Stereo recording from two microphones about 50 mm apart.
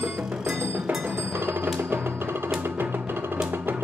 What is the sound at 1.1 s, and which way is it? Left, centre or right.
Tubular bells, right.